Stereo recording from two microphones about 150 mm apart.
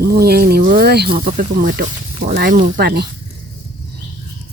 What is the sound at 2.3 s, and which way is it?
Speech, 80° right.